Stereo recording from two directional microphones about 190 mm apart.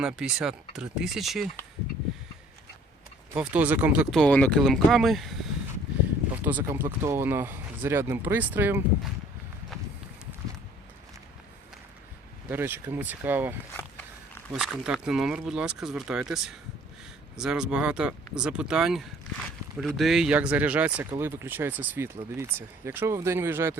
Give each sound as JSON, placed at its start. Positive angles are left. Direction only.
{"t": 0.0, "sound": "speech", "side_deg": -5}
{"t": 3.3, "sound": "speech", "side_deg": -5}
{"t": 6.4, "sound": "speech", "side_deg": -10}
{"t": 12.5, "sound": "speech", "side_deg": -10}